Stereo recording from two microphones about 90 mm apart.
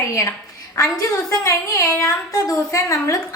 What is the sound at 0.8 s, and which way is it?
A woman's voice, 35° left (ahead or behind).